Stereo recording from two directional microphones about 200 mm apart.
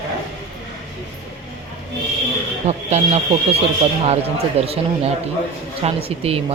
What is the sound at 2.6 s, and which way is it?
Speech, 35° right (ahead or behind).